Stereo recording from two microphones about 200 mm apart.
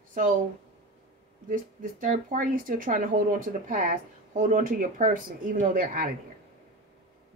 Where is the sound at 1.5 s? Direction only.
40° right (ahead or behind).